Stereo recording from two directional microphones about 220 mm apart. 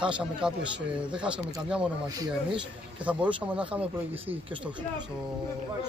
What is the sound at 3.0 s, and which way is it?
Speech, 5° right (ahead or behind).